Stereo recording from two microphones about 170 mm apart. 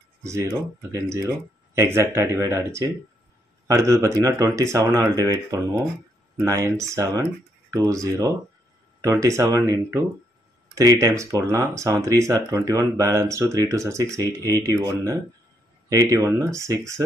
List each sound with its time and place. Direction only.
0.2 s speech: 20° right (ahead or behind)